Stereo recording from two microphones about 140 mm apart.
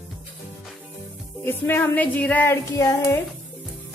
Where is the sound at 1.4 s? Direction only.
15° left (ahead or behind).